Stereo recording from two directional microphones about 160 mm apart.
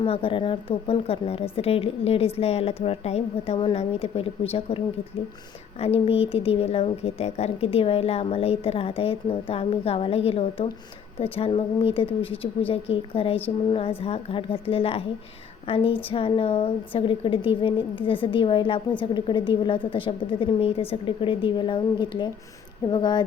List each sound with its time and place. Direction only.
0.0 s a woman's voice: 35° left (ahead or behind)
5.8 s a woman's voice: 40° left (ahead or behind)